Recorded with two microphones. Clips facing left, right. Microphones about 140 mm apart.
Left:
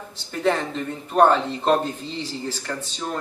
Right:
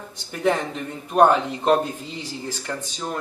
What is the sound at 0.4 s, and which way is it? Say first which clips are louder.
A man's voice: even; 15° right (ahead or behind).